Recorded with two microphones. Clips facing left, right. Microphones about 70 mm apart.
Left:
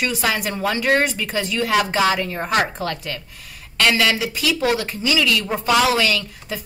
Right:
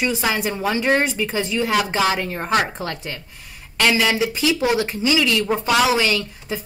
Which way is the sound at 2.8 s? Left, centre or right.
Right.